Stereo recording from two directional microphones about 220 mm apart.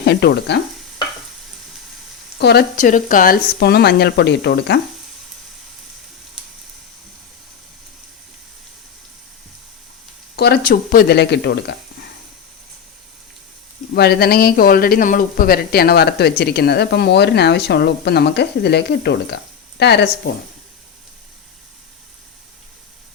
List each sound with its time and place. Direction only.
0.0 s speech: 50° left (ahead or behind)
2.4 s speech: 45° left (ahead or behind)
10.3 s speech: 45° left (ahead or behind)
13.9 s speech: 45° left (ahead or behind)